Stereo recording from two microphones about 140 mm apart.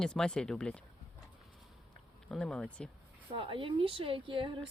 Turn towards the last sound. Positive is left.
turn(degrees=-35)  # may be behind; listen again after turning